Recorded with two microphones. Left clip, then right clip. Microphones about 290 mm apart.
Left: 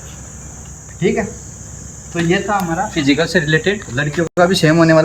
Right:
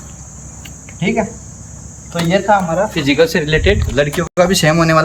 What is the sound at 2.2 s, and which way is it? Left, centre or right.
Speech, centre.